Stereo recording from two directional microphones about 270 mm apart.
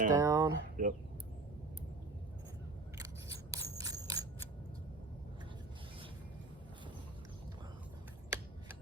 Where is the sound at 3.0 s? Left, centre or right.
Centre.